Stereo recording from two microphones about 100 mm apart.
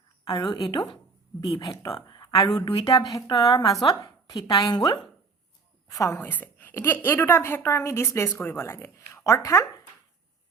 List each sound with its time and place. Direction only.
0.3 s a woman's voice: 45° left (ahead or behind)
6.1 s a woman's voice: 20° left (ahead or behind)